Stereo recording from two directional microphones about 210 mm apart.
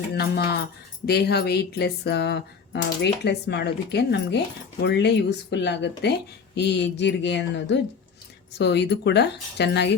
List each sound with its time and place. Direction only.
0.1 s speech: 50° left (ahead or behind)